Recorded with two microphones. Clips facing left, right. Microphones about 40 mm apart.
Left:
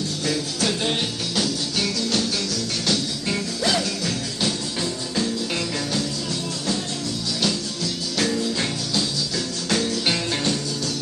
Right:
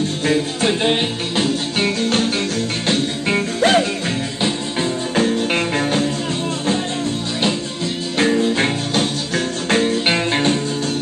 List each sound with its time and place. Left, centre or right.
0.3 s music: right
5.1 s music: right
8.2 s music: right